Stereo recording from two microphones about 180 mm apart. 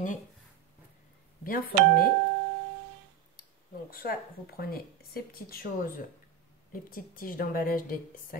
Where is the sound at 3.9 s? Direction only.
55° left (ahead or behind).